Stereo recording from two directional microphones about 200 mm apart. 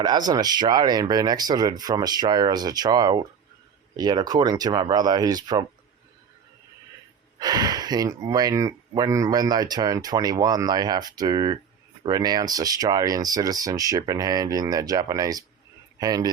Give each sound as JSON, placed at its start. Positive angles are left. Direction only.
{"t": 0.0, "sound": "speech", "side_deg": -20}
{"t": 7.3, "sound": "speech", "side_deg": -20}